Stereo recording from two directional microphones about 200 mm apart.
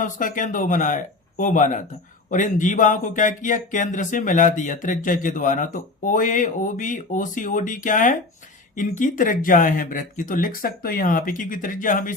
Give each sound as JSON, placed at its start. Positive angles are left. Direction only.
{"t": 0.0, "sound": "speech", "side_deg": 40}